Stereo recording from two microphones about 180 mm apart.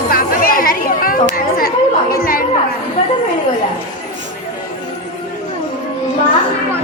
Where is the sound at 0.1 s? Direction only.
50° left (ahead or behind).